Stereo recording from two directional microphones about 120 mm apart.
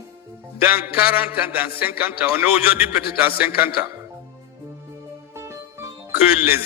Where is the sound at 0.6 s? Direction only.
15° right (ahead or behind).